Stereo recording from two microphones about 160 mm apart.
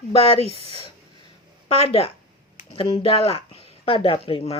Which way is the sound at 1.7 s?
40° left (ahead or behind).